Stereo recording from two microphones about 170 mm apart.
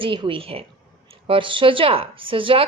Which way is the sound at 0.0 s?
30° right (ahead or behind).